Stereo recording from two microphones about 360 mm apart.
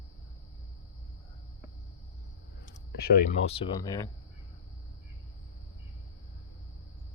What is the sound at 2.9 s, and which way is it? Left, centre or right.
Speech, left.